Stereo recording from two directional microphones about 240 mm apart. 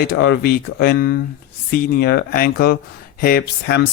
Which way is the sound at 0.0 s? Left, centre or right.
Left.